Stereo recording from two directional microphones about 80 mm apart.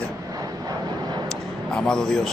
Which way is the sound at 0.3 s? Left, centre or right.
Right.